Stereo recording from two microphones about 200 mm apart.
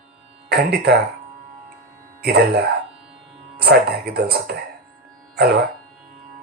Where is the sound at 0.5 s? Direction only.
55° right (ahead or behind).